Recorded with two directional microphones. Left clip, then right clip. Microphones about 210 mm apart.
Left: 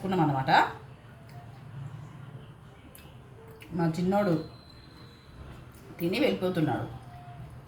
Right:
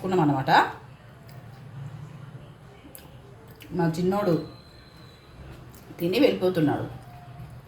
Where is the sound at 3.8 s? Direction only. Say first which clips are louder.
Right 3 dB; 25° right (ahead or behind).